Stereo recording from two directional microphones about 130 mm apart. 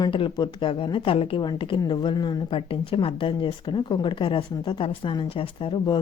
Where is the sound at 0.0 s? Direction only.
35° left (ahead or behind).